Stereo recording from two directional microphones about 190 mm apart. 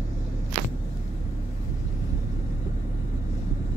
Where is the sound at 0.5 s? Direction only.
25° right (ahead or behind).